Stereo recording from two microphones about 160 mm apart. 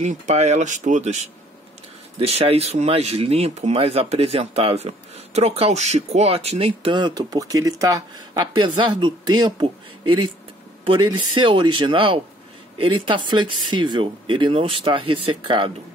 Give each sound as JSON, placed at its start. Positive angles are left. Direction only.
{"t": 0.0, "sound": "speech", "side_deg": -45}
{"t": 2.1, "sound": "speech", "side_deg": -40}